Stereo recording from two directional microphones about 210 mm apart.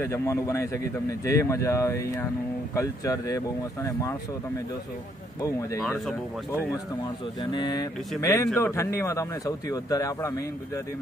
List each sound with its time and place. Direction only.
0.0 s speech: 10° left (ahead or behind)
5.9 s speech: 10° right (ahead or behind)
7.5 s speech: 20° left (ahead or behind)